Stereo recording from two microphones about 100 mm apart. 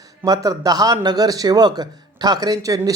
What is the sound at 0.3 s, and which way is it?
Speech, 40° right (ahead or behind).